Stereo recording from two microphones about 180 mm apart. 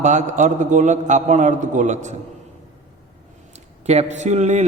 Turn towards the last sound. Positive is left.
turn(degrees=-40)  # may be behind; listen again after turning